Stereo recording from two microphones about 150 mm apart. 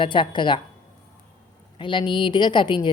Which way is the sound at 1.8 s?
35° left (ahead or behind).